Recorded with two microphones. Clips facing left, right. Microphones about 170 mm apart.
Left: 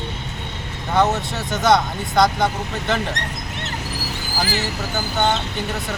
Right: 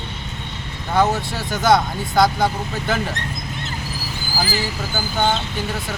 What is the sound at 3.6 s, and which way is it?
Vehicle, 70° left (ahead or behind).